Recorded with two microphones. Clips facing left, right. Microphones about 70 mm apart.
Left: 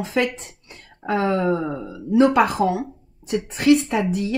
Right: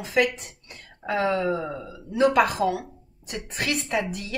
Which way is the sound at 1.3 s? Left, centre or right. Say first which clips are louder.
Left 4 dB; left.